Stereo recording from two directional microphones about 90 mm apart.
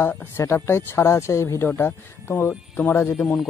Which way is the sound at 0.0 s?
25° left (ahead or behind).